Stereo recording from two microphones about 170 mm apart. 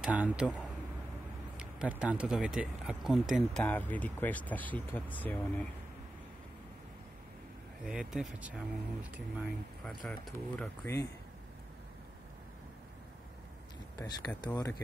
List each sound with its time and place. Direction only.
0.0 s a man's voice: 10° right (ahead or behind)
3.6 s speech: 10° left (ahead or behind)
7.8 s speech: 5° right (ahead or behind)
9.8 s speech: 5° left (ahead or behind)
13.9 s speech: 25° left (ahead or behind)